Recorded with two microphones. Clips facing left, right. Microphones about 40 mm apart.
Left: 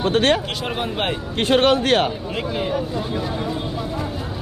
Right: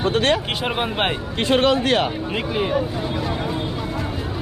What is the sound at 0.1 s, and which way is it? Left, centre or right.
Speech, left.